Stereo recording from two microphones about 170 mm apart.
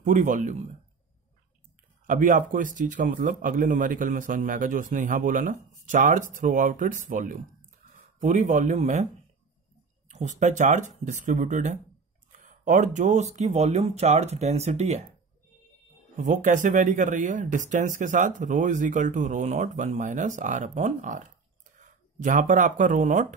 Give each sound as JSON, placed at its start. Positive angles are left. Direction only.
{"t": 0.0, "sound": "speech", "side_deg": -50}
{"t": 2.0, "sound": "speech", "side_deg": -50}
{"t": 10.0, "sound": "a sound", "side_deg": -45}
{"t": 10.4, "sound": "speech", "side_deg": -45}
{"t": 16.2, "sound": "speech", "side_deg": -45}